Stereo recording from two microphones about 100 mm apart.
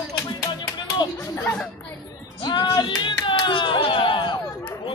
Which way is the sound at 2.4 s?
50° left (ahead or behind).